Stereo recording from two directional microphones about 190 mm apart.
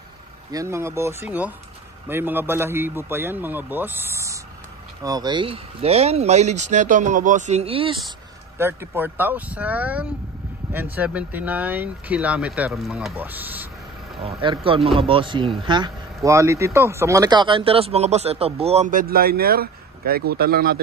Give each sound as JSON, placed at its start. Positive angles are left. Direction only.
{"t": 0.5, "sound": "speech", "side_deg": -15}
{"t": 8.5, "sound": "speech", "side_deg": -10}
{"t": 14.2, "sound": "speech", "side_deg": -25}